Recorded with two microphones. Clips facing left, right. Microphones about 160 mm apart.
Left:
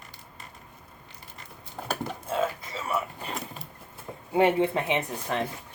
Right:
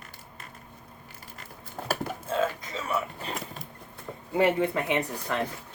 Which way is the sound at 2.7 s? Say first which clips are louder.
Even; centre (ahead or behind).